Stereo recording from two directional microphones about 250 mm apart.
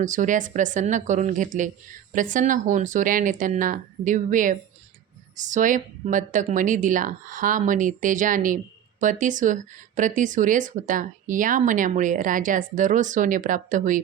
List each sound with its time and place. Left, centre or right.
0.0 s a woman's voice: right